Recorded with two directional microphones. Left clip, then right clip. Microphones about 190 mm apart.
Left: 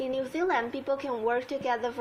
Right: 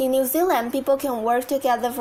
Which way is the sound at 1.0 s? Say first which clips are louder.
Right 7 dB; 30° right (ahead or behind).